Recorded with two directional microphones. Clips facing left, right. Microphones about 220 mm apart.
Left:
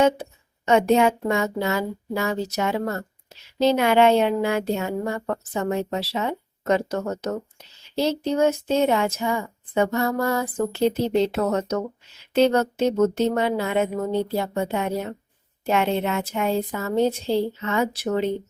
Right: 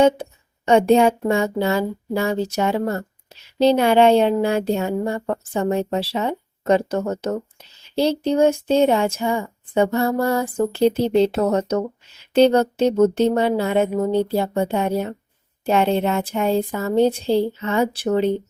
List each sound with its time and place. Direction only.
0.6 s speech: 30° right (ahead or behind)